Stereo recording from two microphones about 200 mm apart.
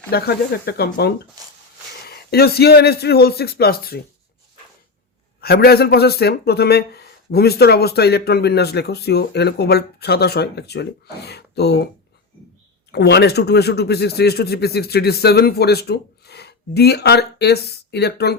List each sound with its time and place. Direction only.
0.1 s speech: 50° left (ahead or behind)
2.0 s speech: 50° left (ahead or behind)
5.4 s speech: 50° left (ahead or behind)
12.9 s speech: 55° left (ahead or behind)